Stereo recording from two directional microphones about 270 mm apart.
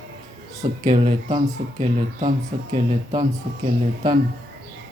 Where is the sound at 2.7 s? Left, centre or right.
Right.